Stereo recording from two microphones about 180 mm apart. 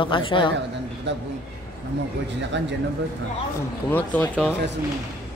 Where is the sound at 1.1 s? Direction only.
75° right (ahead or behind).